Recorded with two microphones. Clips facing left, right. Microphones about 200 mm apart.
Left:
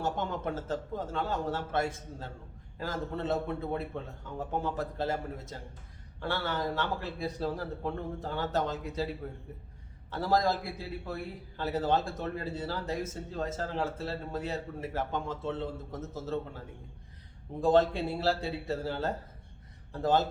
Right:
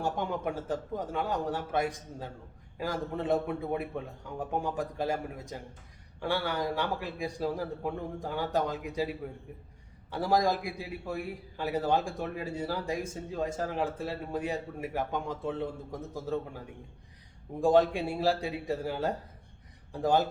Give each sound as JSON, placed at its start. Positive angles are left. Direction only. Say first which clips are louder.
{"t": 0.0, "sound": "a man's voice", "louder": "right 1 dB", "side_deg": -15}
{"t": 17.6, "sound": "a man's voice", "louder": "right 1 dB", "side_deg": -15}